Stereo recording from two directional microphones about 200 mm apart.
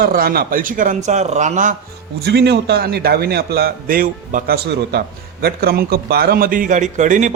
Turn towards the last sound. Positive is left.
turn(degrees=-40)  # may be behind; listen again after turning